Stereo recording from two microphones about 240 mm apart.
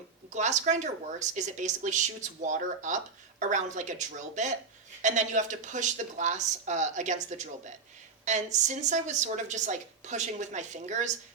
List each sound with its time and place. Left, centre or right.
0.3 s speech: right